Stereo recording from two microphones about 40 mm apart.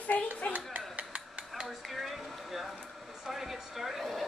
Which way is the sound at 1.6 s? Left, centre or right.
Centre.